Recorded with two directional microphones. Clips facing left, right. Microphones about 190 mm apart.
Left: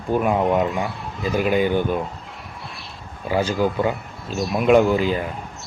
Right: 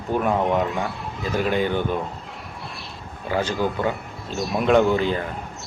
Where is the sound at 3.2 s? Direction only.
10° left (ahead or behind).